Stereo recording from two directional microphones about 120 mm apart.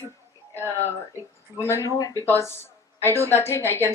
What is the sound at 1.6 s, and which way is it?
Speech, 25° left (ahead or behind).